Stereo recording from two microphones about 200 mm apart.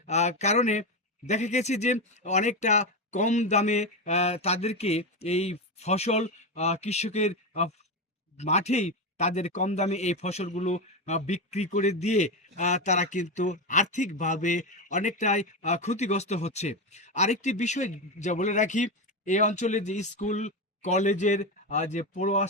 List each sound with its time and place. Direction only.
0.0 s speech: 35° left (ahead or behind)